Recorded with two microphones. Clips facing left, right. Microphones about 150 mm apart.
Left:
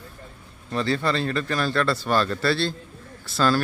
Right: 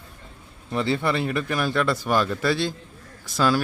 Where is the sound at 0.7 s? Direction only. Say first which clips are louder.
Even; 15° right (ahead or behind).